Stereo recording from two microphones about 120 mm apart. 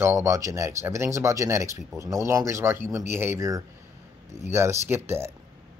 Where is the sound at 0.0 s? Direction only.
25° right (ahead or behind).